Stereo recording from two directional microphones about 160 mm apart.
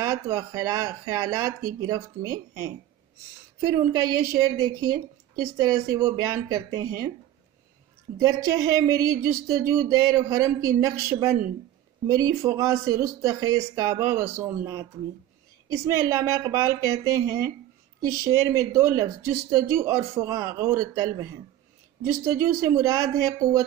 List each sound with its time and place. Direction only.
0.0 s speech: 20° right (ahead or behind)
3.6 s speech: 25° right (ahead or behind)
8.2 s speech: 20° right (ahead or behind)